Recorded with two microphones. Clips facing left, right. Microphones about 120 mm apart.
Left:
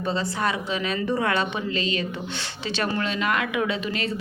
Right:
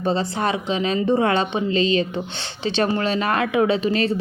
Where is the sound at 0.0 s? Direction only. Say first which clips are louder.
Right 4 dB; 30° right (ahead or behind).